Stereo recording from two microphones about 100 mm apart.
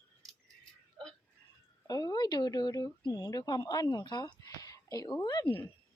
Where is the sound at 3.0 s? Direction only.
50° left (ahead or behind).